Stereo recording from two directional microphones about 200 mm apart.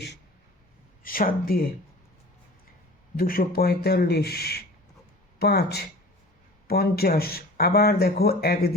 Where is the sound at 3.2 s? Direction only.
45° left (ahead or behind).